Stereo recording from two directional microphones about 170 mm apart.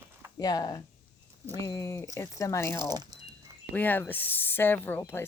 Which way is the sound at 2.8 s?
25° right (ahead or behind).